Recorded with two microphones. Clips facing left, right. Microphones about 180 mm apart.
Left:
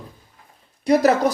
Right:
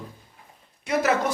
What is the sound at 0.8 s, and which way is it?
Speech, 35° left (ahead or behind).